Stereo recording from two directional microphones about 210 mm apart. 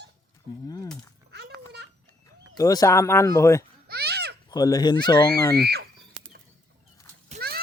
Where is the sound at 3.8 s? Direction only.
50° right (ahead or behind).